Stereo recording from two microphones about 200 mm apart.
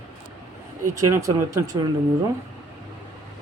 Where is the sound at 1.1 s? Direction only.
15° right (ahead or behind).